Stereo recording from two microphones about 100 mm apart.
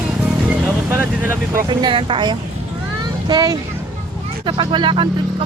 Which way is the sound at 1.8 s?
55° right (ahead or behind).